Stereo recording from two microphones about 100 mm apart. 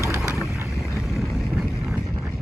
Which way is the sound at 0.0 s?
30° left (ahead or behind).